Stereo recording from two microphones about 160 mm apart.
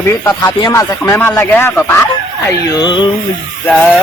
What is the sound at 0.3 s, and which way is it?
Speech, 20° left (ahead or behind).